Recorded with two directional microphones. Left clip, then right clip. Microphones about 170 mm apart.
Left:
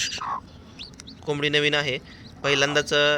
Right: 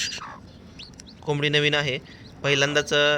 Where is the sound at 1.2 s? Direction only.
5° right (ahead or behind).